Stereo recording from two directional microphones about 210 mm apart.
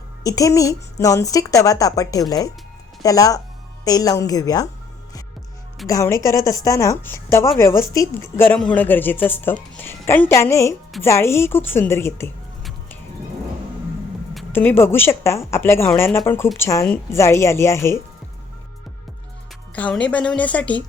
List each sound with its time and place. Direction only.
0.3 s a woman's voice: 15° left (ahead or behind)
5.9 s a woman's voice: 15° left (ahead or behind)
14.5 s a woman's voice: 10° left (ahead or behind)
19.7 s a woman's voice: 5° left (ahead or behind)